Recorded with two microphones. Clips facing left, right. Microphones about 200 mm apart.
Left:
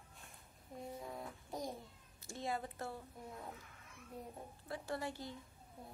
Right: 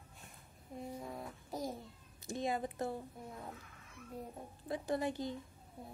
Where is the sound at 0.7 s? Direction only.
Centre (ahead or behind).